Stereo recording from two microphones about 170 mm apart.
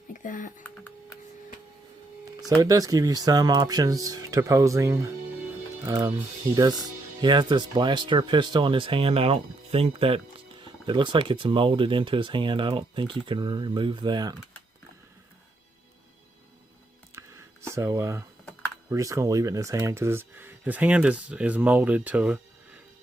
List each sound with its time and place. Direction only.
0.1 s typing: 50° left (ahead or behind)
2.6 s speech: 20° right (ahead or behind)
17.2 s a sound: 15° right (ahead or behind)
18.9 s speech: 20° right (ahead or behind)